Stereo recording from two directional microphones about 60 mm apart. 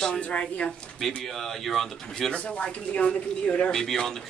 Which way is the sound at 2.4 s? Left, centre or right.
Left.